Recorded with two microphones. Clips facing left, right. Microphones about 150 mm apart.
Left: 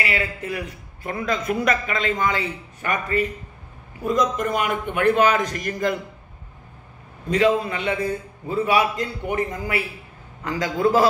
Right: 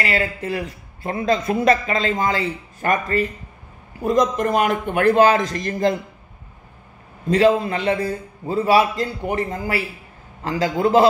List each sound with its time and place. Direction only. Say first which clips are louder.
0.0 s a man's voice: right 3 dB; 40° right (ahead or behind)
7.2 s a man's voice: right 3 dB; 35° right (ahead or behind)